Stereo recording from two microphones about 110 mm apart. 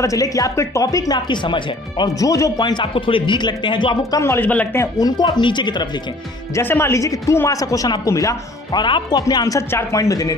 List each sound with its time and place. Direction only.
0.0 s speech: 30° left (ahead or behind); by 2.0 s 45° left (ahead or behind)
2.1 s speech: 30° left (ahead or behind)
2.6 s speech: 50° left (ahead or behind)
4.2 s speech: 20° left (ahead or behind)
4.9 s speech: 35° left (ahead or behind)
6.5 s speech: 20° left (ahead or behind)
8.8 s speech: 45° left (ahead or behind)
9.3 s speech: 30° left (ahead or behind)